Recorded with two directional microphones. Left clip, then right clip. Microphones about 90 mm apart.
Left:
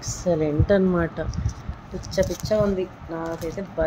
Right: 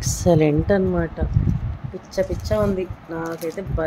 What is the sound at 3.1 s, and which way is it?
Speech, 20° right (ahead or behind).